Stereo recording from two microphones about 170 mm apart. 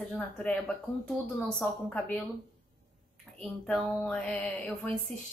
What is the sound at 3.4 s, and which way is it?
A woman's voice, 5° left (ahead or behind).